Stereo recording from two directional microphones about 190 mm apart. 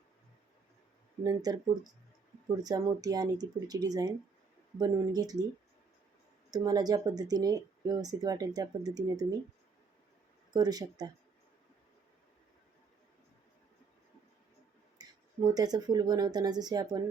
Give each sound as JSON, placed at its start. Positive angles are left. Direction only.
{"t": 1.2, "sound": "speech", "side_deg": -20}
{"t": 2.6, "sound": "speech", "side_deg": -20}
{"t": 6.5, "sound": "speech", "side_deg": -20}
{"t": 10.5, "sound": "speech", "side_deg": -20}
{"t": 15.0, "sound": "a sound", "side_deg": -20}
{"t": 15.5, "sound": "speech", "side_deg": -20}